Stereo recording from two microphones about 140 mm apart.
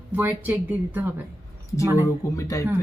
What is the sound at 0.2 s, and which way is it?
A woman's voice, 15° right (ahead or behind).